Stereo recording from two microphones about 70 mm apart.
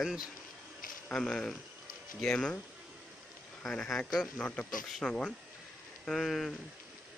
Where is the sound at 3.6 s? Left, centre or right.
Centre.